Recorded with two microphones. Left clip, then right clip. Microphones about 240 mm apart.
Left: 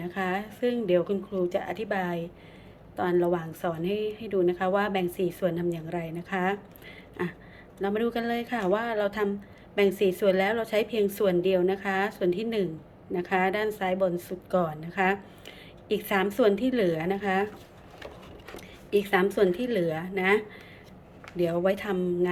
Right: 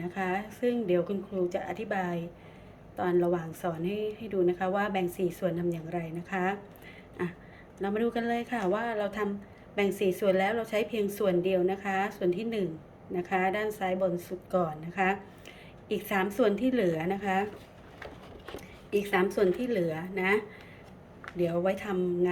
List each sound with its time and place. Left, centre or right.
0.0 s a woman's voice: centre
18.9 s a woman's voice: centre